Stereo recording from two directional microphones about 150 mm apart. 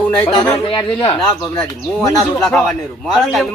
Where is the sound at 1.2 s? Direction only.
5° left (ahead or behind).